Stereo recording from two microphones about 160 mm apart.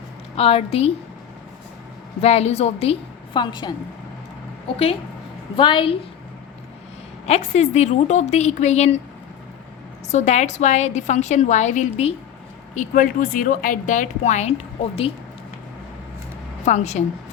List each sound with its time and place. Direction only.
0.3 s a woman's voice: 35° left (ahead or behind)
2.2 s a woman's voice: 40° left (ahead or behind)
5.5 s a woman's voice: 30° left (ahead or behind)
7.3 s a woman's voice: 45° left (ahead or behind)
10.1 s a woman's voice: 45° left (ahead or behind)
16.6 s a woman's voice: 45° left (ahead or behind)